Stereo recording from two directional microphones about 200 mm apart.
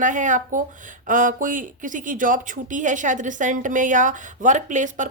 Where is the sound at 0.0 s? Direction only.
40° right (ahead or behind).